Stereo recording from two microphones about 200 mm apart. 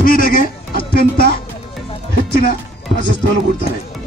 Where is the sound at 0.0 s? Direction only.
45° left (ahead or behind).